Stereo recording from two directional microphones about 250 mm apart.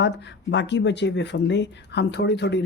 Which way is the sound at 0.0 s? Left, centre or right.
Left.